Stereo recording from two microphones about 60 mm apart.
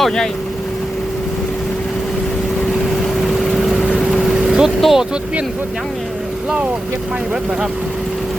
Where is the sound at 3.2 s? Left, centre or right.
Centre.